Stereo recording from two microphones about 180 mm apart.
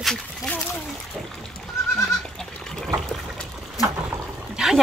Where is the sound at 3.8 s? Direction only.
20° left (ahead or behind).